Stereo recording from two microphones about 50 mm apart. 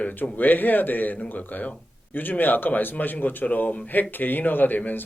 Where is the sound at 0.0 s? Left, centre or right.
Left.